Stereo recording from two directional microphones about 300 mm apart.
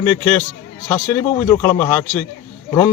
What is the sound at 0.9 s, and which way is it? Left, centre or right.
Speech, centre.